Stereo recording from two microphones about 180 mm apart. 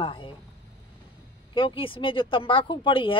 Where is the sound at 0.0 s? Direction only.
30° left (ahead or behind).